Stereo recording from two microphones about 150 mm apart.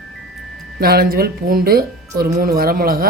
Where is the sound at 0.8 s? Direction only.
90° right.